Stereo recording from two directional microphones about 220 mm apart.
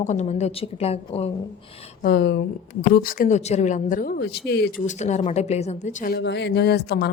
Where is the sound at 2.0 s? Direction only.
50° left (ahead or behind).